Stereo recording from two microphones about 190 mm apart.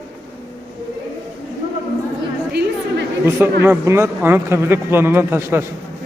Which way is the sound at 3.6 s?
15° right (ahead or behind).